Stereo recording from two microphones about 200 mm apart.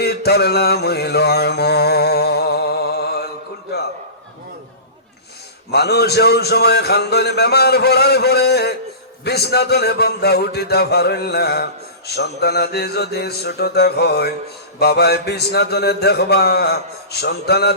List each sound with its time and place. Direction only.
0.0 s mantra: 55° left (ahead or behind)
5.7 s mantra: 55° left (ahead or behind)
9.2 s a man's voice: 55° left (ahead or behind)
14.8 s mantra: 55° left (ahead or behind)